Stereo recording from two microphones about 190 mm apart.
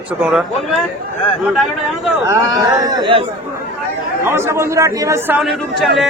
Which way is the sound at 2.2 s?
20° right (ahead or behind).